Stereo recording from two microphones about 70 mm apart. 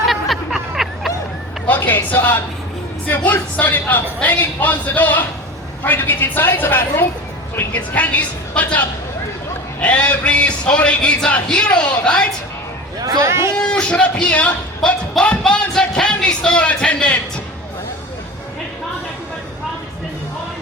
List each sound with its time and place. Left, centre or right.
0.1 s a sound: centre
1.6 s a sound: left
3.1 s a woman's voice: left
9.8 s music: centre
13.1 s speech: right
13.6 s music: centre